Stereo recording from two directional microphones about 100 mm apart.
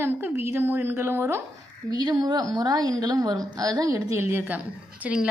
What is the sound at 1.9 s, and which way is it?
A woman's voice, 45° right (ahead or behind).